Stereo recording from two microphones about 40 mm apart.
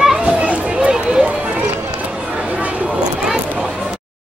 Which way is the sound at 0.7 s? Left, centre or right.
Right.